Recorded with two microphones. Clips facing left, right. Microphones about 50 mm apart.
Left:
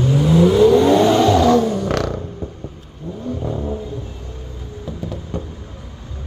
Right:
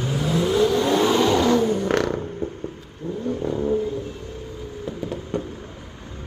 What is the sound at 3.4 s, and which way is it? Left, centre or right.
Vehicle, centre.